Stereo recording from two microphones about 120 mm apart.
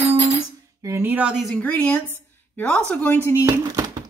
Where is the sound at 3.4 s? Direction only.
30° right (ahead or behind).